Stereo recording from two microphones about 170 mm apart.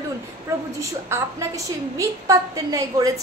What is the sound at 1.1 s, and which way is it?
A woman's voice, 15° right (ahead or behind).